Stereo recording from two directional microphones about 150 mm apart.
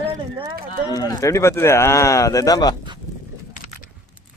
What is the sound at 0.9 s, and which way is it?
Speech, 25° left (ahead or behind).